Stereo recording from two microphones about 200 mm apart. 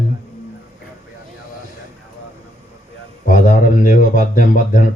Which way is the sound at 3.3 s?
40° left (ahead or behind).